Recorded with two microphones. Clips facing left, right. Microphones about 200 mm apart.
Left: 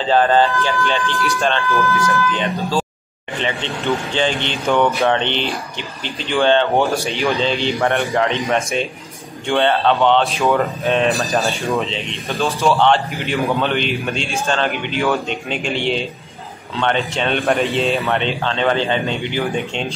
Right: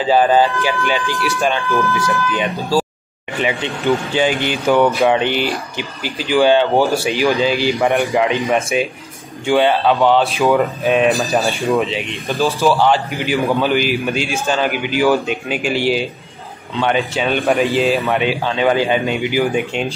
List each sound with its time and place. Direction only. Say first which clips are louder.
0.0 s speech: right 1 dB; 10° right (ahead or behind)
10.8 s speech: right 3 dB; 15° right (ahead or behind)
11.1 s speech: right 2 dB; centre (ahead or behind)